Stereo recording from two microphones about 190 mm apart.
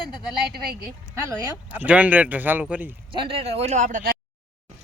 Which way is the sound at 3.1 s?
25° right (ahead or behind).